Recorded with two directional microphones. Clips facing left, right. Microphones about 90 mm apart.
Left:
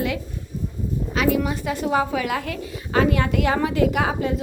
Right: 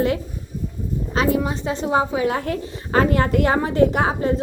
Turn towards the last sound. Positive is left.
turn(degrees=-35)  # may be behind; listen again after turning